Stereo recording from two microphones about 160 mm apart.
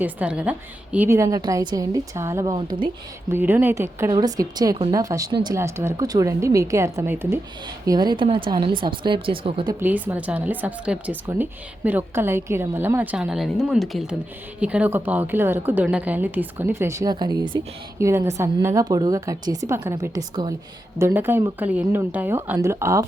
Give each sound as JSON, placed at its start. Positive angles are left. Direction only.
{"t": 0.0, "sound": "a woman's voice", "side_deg": -10}
{"t": 2.5, "sound": "speech", "side_deg": -30}
{"t": 3.3, "sound": "a woman's voice", "side_deg": -10}
{"t": 4.0, "sound": "a woman's voice", "side_deg": -25}
{"t": 7.9, "sound": "a woman's voice", "side_deg": -25}
{"t": 9.8, "sound": "a woman's voice", "side_deg": -10}
{"t": 21.0, "sound": "a woman's voice", "side_deg": -15}